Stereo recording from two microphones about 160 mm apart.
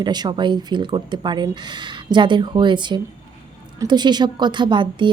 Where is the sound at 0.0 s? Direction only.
25° right (ahead or behind).